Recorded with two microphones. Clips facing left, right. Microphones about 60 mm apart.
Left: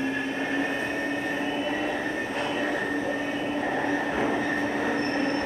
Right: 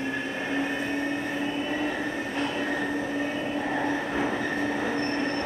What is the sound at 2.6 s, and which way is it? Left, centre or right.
Train, left.